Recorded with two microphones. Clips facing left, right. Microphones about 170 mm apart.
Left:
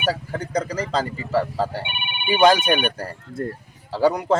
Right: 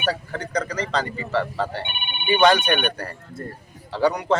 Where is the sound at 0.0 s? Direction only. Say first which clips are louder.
Left 1 dB; 10° left (ahead or behind).